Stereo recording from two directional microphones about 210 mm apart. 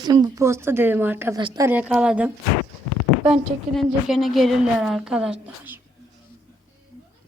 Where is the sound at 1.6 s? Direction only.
5° right (ahead or behind).